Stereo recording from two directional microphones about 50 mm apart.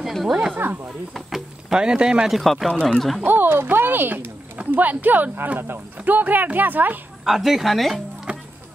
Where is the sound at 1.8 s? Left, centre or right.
Centre.